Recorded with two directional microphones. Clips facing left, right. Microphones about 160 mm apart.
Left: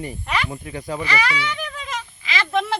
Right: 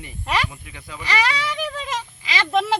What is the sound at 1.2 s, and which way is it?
Speech, 30° right (ahead or behind).